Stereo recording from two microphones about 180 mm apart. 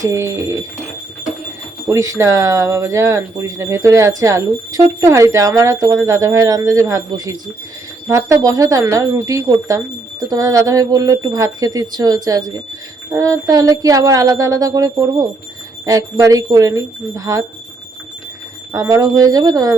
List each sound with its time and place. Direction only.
0.0 s speech: 15° right (ahead or behind)
1.9 s speech: 15° right (ahead or behind)
18.7 s speech: 20° right (ahead or behind)